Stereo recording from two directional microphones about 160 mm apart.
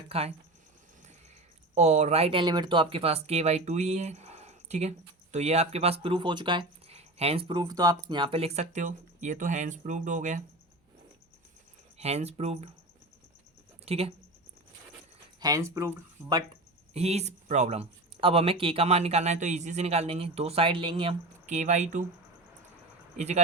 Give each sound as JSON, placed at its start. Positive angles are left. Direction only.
{"t": 0.1, "sound": "speech", "side_deg": -40}
{"t": 1.7, "sound": "speech", "side_deg": -45}
{"t": 11.9, "sound": "speech", "side_deg": -40}
{"t": 13.8, "sound": "speech", "side_deg": -40}
{"t": 15.4, "sound": "speech", "side_deg": -20}
{"t": 16.9, "sound": "speech", "side_deg": -40}
{"t": 21.4, "sound": "speech", "side_deg": -50}
{"t": 23.1, "sound": "speech", "side_deg": -45}